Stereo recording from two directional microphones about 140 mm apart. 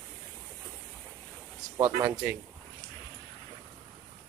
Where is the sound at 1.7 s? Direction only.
25° right (ahead or behind).